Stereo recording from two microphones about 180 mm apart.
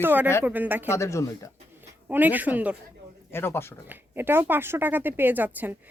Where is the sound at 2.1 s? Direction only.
10° right (ahead or behind).